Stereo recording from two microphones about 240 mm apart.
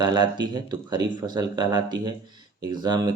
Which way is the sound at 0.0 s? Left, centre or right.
Centre.